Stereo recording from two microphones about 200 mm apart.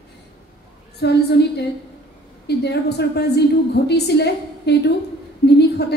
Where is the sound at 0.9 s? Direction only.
55° left (ahead or behind).